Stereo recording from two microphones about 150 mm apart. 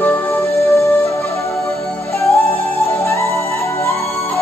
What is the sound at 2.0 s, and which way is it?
Music, 20° left (ahead or behind).